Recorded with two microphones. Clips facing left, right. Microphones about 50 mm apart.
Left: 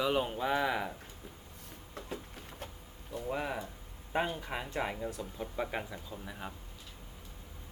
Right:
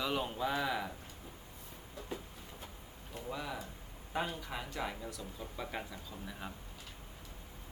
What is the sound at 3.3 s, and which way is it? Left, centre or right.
Speech, left.